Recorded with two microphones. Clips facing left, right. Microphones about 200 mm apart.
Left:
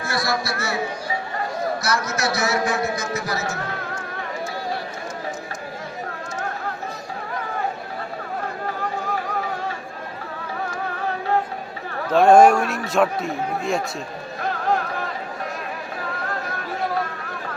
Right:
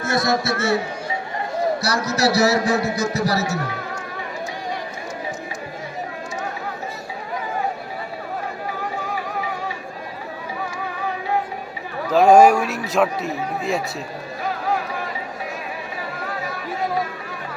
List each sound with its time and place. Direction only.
0.0 s a man's voice: 20° right (ahead or behind)
1.8 s speech: 35° right (ahead or behind)
12.1 s a man's voice: 5° right (ahead or behind)
14.4 s music: 5° right (ahead or behind)